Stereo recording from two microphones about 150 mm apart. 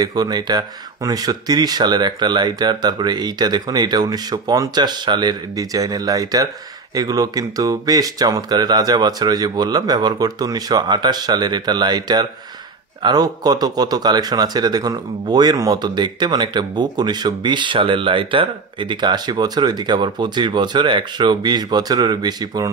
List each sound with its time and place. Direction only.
0.0 s speech: 25° right (ahead or behind)